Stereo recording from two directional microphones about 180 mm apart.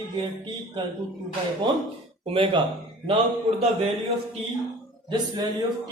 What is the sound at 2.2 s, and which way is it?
Speech, 30° right (ahead or behind).